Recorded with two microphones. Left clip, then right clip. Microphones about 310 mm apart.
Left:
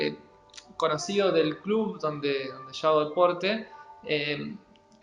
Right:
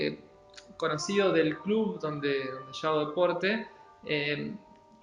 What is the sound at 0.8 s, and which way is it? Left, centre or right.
Speech, centre.